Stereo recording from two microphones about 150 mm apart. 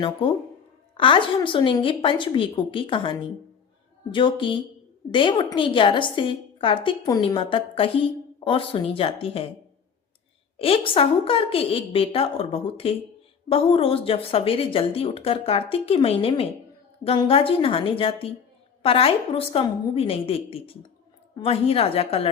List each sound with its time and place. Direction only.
0.0 s a woman's voice: 35° left (ahead or behind)
10.6 s a woman's voice: 40° left (ahead or behind)